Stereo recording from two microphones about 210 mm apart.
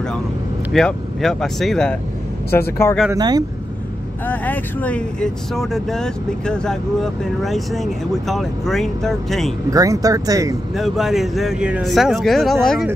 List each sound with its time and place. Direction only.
0.7 s speech: centre (ahead or behind)
3.1 s speech: 20° right (ahead or behind)
4.3 s speech: 10° left (ahead or behind)
9.7 s speech: 15° right (ahead or behind)
10.7 s speech: centre (ahead or behind)